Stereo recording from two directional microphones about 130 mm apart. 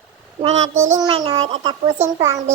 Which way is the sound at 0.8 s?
20° right (ahead or behind).